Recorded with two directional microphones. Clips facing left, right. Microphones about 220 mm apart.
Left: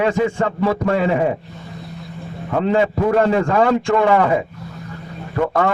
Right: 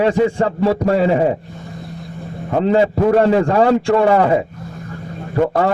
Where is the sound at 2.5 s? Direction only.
30° right (ahead or behind).